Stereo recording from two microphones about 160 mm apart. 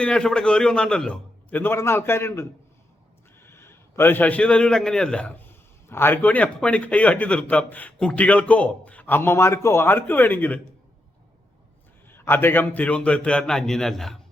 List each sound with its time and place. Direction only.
0.0 s a man's voice: 5° left (ahead or behind)
12.0 s a man's voice: 15° left (ahead or behind)